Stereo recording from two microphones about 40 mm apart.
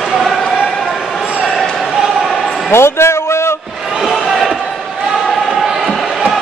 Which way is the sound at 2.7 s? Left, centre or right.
Left.